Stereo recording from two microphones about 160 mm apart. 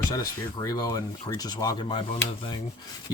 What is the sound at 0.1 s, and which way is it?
Speech, 25° left (ahead or behind).